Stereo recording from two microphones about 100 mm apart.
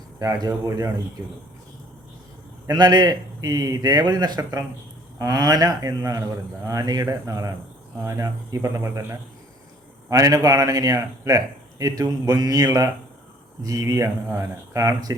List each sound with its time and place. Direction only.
0.2 s a man's voice: 35° right (ahead or behind)
2.6 s a man's voice: 45° right (ahead or behind)